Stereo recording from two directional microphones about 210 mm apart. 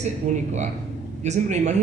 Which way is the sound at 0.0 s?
35° right (ahead or behind).